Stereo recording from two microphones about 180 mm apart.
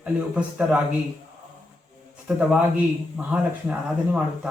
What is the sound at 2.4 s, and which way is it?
A man's voice, 5° right (ahead or behind).